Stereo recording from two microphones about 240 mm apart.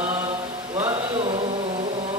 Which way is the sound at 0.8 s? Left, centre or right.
Centre.